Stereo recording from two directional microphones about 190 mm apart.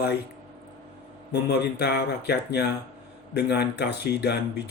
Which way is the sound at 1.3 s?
60° left (ahead or behind).